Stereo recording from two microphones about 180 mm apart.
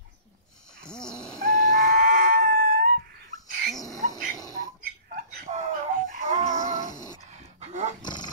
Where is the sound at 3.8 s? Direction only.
20° left (ahead or behind).